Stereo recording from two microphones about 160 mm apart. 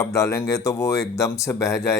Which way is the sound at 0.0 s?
20° left (ahead or behind).